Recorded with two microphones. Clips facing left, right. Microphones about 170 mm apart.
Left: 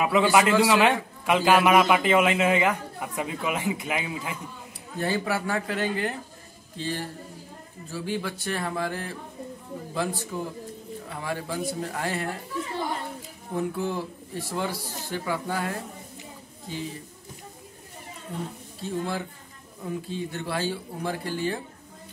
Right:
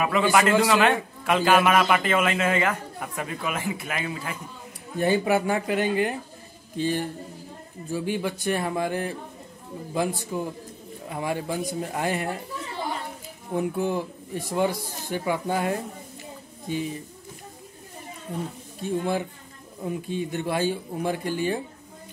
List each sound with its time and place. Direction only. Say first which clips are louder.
0.0 s a man's voice: even; 15° left (ahead or behind)
4.9 s speech: right 5 dB; 15° right (ahead or behind)
10.3 s a man's voice: right 2 dB; 20° right (ahead or behind)
13.6 s speech: right 3 dB; 15° right (ahead or behind)
18.8 s speech: right 4 dB; 15° right (ahead or behind)